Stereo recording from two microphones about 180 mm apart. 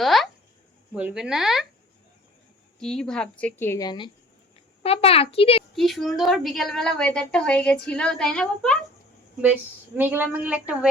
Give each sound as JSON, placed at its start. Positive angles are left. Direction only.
{"t": 0.0, "sound": "a sound", "side_deg": 0}
{"t": 0.9, "sound": "a woman's voice", "side_deg": -5}
{"t": 2.8, "sound": "a woman's voice", "side_deg": 5}
{"t": 5.7, "sound": "a woman's voice", "side_deg": 0}
{"t": 10.0, "sound": "a woman's voice", "side_deg": -10}